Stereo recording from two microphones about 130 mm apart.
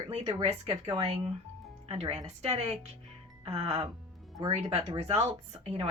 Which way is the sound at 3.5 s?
55° right (ahead or behind).